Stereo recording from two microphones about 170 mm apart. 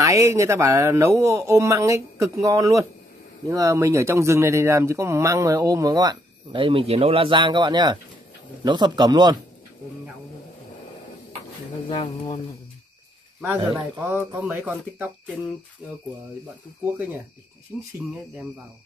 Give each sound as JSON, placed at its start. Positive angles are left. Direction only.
{"t": 0.0, "sound": "speech", "side_deg": -20}
{"t": 11.9, "sound": "speech", "side_deg": 35}
{"t": 14.0, "sound": "speech", "side_deg": -15}
{"t": 17.7, "sound": "speech", "side_deg": -5}